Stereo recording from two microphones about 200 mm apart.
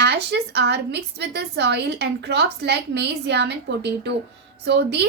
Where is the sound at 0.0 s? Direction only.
55° right (ahead or behind).